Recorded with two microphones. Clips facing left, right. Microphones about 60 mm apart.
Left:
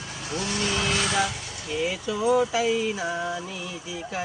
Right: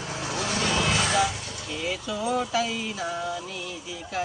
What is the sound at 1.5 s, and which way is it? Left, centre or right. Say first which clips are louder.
Speech: left 3 dB; centre.